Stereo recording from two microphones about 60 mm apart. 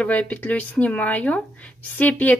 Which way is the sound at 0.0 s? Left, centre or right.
Left.